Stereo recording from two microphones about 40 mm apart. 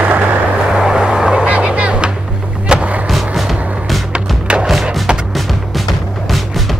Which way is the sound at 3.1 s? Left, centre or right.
Centre.